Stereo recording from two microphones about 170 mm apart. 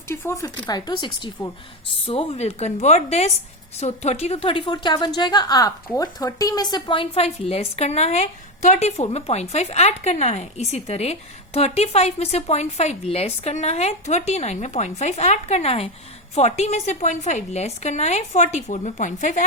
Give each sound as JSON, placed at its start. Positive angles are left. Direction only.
{"t": 0.1, "sound": "a woman's voice", "side_deg": 15}